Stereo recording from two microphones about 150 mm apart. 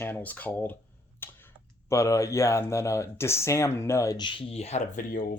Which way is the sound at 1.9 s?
20° left (ahead or behind).